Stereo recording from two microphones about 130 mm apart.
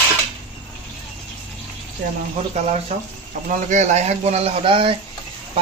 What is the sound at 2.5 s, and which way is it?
A man's voice, 55° right (ahead or behind).